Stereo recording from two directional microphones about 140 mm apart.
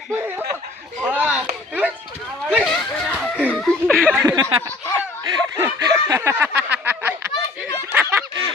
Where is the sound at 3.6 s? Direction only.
Centre (ahead or behind).